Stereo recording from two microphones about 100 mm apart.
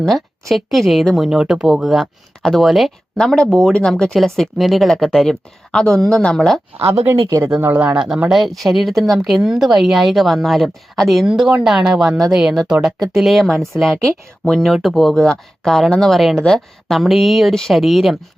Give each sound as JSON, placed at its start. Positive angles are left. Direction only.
{"t": 0.0, "sound": "speech", "side_deg": 0}
{"t": 6.7, "sound": "speech", "side_deg": -80}
{"t": 7.3, "sound": "speech", "side_deg": -30}
{"t": 7.6, "sound": "speech", "side_deg": -15}
{"t": 8.3, "sound": "speech", "side_deg": 0}